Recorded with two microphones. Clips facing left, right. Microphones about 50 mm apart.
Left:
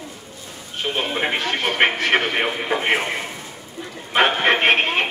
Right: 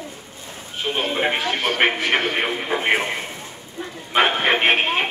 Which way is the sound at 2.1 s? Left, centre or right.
Centre.